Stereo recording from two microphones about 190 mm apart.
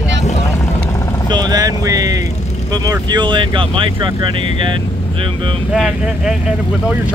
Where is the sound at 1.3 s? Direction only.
20° right (ahead or behind).